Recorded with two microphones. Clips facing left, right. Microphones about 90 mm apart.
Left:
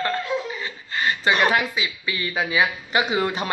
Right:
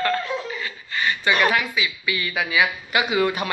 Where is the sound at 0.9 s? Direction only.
35° left (ahead or behind).